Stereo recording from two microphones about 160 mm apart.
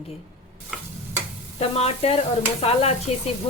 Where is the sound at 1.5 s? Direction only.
40° left (ahead or behind).